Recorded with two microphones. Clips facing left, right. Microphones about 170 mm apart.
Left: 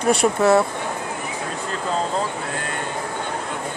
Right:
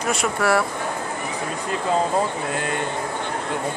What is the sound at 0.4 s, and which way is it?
Speech, 20° left (ahead or behind).